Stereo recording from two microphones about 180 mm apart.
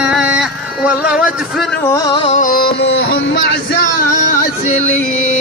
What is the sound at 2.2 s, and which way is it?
Music, 45° left (ahead or behind).